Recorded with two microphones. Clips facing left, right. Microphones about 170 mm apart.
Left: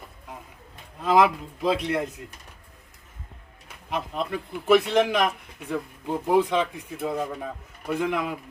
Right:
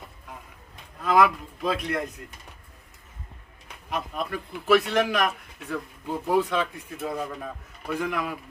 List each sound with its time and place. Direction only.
0.9 s a man's voice: 25° left (ahead or behind)
4.1 s speech: 25° left (ahead or behind)
7.9 s speech: 20° left (ahead or behind)